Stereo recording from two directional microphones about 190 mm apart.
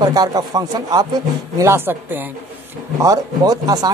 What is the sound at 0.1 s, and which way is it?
A woman's voice, 20° right (ahead or behind).